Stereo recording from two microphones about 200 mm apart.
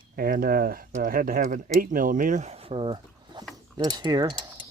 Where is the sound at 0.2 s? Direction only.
45° right (ahead or behind); by 4.4 s 20° right (ahead or behind).